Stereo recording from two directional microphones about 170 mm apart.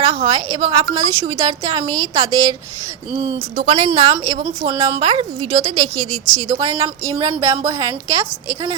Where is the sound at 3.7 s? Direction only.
40° right (ahead or behind).